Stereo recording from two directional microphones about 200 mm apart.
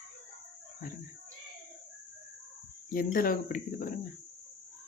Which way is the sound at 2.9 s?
45° left (ahead or behind).